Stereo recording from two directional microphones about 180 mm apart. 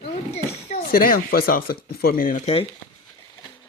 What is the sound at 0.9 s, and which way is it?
Speech, 50° left (ahead or behind).